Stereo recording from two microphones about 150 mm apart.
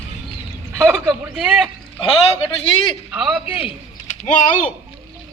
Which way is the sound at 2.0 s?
40° left (ahead or behind).